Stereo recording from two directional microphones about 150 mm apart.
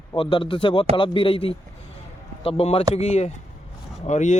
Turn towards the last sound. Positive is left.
turn(degrees=50)  # may be behind; listen again after turning